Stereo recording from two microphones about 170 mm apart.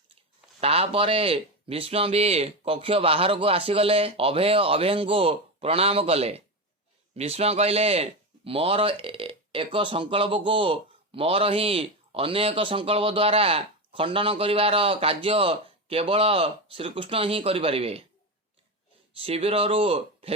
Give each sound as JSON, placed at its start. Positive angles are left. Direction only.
{"t": 0.6, "sound": "speech", "side_deg": -35}
{"t": 19.1, "sound": "speech", "side_deg": -35}